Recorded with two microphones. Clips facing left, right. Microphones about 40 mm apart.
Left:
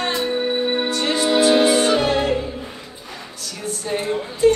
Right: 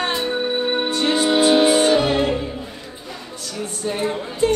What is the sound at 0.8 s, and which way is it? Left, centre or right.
Music, right.